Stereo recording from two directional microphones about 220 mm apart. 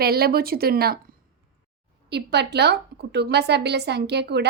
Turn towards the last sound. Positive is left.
turn(degrees=-50)  # may be behind; listen again after turning